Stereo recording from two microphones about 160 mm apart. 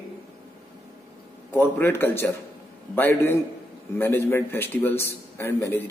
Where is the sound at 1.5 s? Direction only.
15° left (ahead or behind).